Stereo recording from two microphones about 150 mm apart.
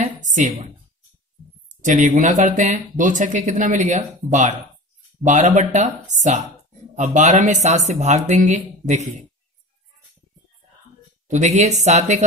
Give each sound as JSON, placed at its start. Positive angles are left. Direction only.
{"t": 0.2, "sound": "a woman's voice", "side_deg": -55}
{"t": 1.8, "sound": "speech", "side_deg": -55}
{"t": 11.2, "sound": "speech", "side_deg": -50}